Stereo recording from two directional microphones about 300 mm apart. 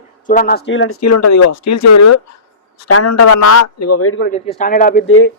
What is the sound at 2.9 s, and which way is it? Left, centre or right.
A man's voice, left.